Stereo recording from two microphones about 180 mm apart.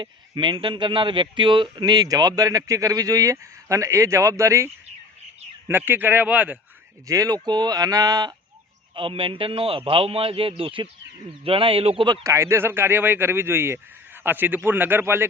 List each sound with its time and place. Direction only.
0.0 s speech: 25° right (ahead or behind); by 6.6 s 10° right (ahead or behind)
7.1 s a man's voice: 20° right (ahead or behind)